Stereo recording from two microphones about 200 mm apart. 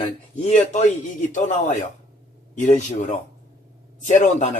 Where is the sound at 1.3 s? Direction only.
35° left (ahead or behind).